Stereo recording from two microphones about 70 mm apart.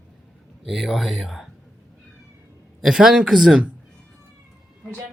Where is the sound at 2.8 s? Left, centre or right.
Centre.